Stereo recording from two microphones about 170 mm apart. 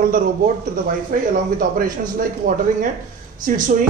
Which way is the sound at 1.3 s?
55° right (ahead or behind).